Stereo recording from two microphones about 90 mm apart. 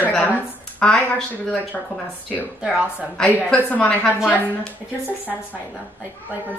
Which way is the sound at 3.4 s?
15° left (ahead or behind).